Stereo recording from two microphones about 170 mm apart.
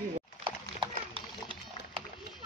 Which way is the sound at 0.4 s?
30° right (ahead or behind).